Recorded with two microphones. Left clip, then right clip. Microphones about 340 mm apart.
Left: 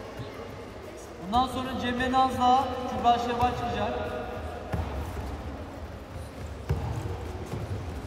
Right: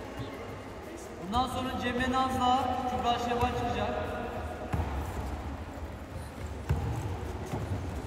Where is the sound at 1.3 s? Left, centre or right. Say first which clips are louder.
Left 4 dB; left.